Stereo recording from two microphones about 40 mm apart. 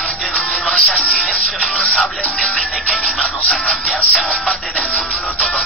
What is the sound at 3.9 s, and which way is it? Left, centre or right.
Music, left.